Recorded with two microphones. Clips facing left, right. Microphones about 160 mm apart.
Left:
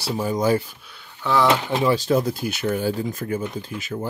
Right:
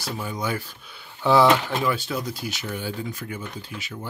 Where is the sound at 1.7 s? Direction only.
20° left (ahead or behind).